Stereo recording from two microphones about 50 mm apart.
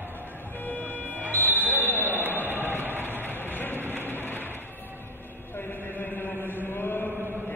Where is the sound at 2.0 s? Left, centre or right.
Right.